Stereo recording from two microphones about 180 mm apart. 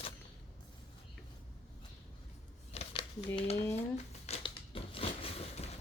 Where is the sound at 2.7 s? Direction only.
35° left (ahead or behind).